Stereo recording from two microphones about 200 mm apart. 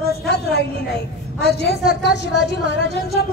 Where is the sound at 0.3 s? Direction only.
55° left (ahead or behind).